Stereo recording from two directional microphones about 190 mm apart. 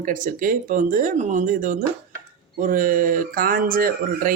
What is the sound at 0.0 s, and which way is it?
Speech, 45° right (ahead or behind).